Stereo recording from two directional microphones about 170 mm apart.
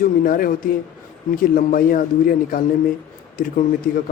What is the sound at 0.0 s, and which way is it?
A man's voice, 55° left (ahead or behind).